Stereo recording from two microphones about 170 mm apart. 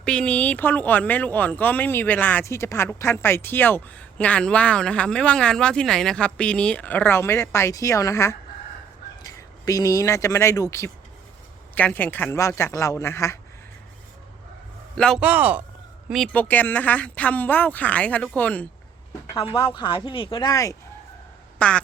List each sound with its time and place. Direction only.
0.0 s speech: 5° left (ahead or behind)
14.9 s a man's voice: 5° left (ahead or behind)
15.2 s a man's voice: 10° right (ahead or behind)
16.3 s speech: 10° left (ahead or behind)
19.5 s speech: 30° left (ahead or behind)
21.6 s speech: 5° left (ahead or behind)